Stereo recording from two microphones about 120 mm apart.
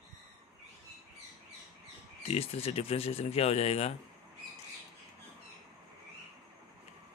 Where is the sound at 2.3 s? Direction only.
55° left (ahead or behind).